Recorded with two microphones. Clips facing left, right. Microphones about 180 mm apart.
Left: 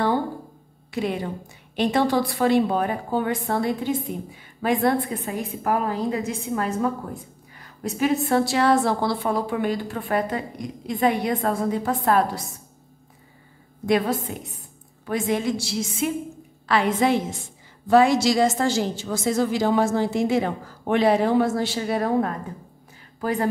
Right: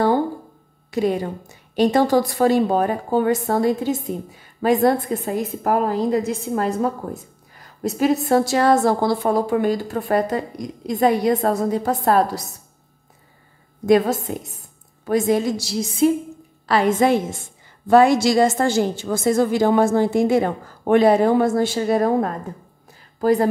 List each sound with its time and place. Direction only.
0.9 s a woman's voice: 40° right (ahead or behind)
13.8 s a woman's voice: 45° right (ahead or behind)